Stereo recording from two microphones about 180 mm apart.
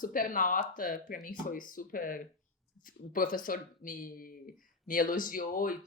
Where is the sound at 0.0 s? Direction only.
50° left (ahead or behind).